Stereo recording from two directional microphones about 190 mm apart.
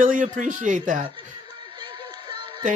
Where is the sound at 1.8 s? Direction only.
25° right (ahead or behind).